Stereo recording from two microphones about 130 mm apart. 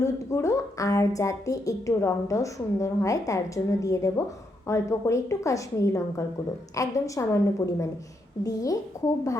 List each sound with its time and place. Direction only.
0.0 s a woman's voice: 25° left (ahead or behind)